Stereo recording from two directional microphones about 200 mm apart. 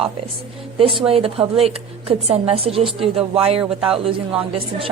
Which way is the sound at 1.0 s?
30° right (ahead or behind).